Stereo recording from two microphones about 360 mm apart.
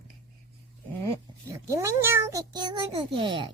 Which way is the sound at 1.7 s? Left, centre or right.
Centre.